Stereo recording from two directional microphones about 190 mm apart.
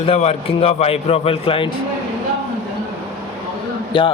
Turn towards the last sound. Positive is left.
turn(degrees=25)  # may be behind; listen again after turning